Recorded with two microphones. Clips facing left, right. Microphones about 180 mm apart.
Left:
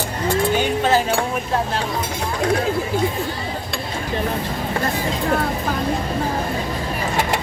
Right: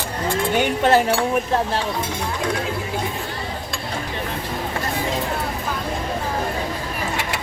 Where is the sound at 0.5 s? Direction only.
65° right (ahead or behind).